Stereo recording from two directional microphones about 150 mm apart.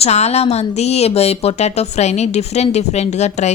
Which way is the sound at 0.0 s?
45° left (ahead or behind).